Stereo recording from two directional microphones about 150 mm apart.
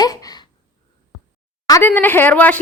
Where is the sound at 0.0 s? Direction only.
25° left (ahead or behind).